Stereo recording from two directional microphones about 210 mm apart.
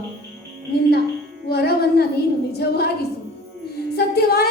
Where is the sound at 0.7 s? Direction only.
50° left (ahead or behind).